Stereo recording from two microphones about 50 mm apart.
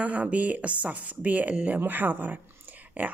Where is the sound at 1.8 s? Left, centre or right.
Right.